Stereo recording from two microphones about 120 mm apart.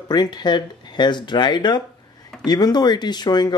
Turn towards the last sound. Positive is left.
turn(degrees=35)  # may be behind; listen again after turning